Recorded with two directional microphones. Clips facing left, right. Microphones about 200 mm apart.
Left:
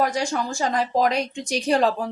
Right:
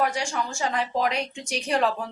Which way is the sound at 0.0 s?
35° left (ahead or behind).